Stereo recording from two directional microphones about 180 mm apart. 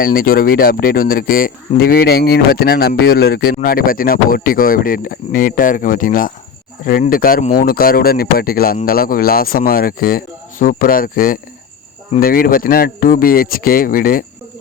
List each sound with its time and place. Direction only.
0.0 s speech: 55° left (ahead or behind)